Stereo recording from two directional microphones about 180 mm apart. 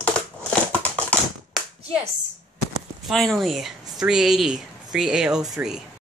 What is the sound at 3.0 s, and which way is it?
Speech, centre (ahead or behind).